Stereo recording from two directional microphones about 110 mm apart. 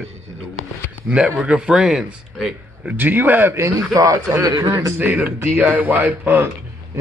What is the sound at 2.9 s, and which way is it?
Speech, 15° right (ahead or behind).